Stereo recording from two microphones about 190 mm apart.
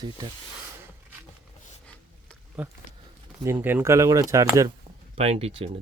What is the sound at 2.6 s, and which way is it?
Speech, 5° right (ahead or behind).